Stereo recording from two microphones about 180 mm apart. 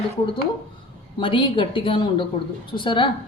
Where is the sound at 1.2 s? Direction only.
25° left (ahead or behind).